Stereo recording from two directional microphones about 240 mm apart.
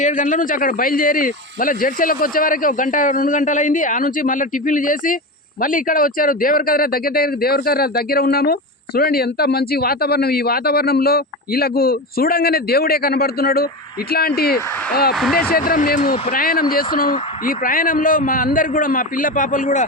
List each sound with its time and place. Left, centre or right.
0.0 s speech: left
15.1 s speech: centre
15.5 s speech: left